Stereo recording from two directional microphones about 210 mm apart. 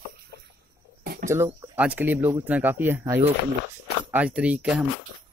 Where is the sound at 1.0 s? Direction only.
45° right (ahead or behind).